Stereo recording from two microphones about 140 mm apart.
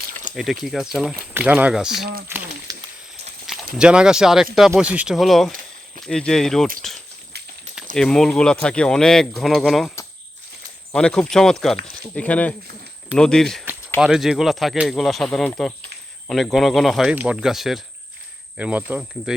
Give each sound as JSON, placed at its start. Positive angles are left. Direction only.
{"t": 0.3, "sound": "speech", "side_deg": 0}
{"t": 2.7, "sound": "a sound", "side_deg": -25}
{"t": 3.4, "sound": "clip-clop", "side_deg": 0}
{"t": 3.8, "sound": "speech", "side_deg": -5}
{"t": 7.9, "sound": "speech", "side_deg": 5}
{"t": 10.9, "sound": "speech", "side_deg": 5}